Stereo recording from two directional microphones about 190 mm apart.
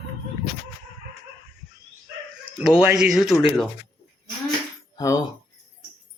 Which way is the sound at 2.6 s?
5° right (ahead or behind).